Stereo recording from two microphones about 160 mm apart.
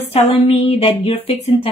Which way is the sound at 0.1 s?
40° left (ahead or behind).